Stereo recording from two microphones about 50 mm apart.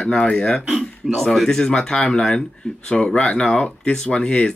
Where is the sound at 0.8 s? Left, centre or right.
Centre.